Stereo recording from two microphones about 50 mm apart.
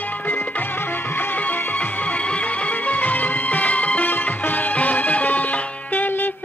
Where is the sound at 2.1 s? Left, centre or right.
Left.